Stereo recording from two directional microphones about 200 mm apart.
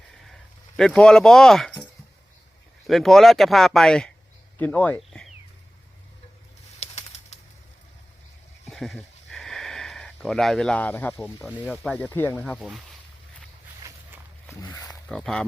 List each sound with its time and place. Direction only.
0.8 s speech: 5° left (ahead or behind)
6.7 s bird: 35° left (ahead or behind)
8.7 s sniff: centre (ahead or behind)
11.7 s speech: 5° left (ahead or behind)
12.5 s speech: 5° right (ahead or behind)
14.5 s pig: 15° left (ahead or behind)
15.0 s speech: 5° left (ahead or behind)